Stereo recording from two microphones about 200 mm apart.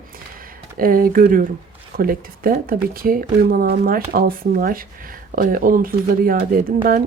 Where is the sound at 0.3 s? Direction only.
45° right (ahead or behind).